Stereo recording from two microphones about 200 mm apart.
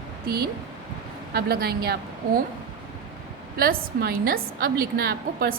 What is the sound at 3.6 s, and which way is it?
A woman's voice, 45° right (ahead or behind).